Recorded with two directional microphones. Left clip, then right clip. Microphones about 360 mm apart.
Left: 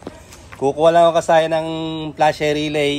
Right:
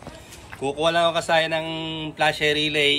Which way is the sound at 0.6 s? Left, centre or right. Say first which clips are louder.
Left 8 dB; centre.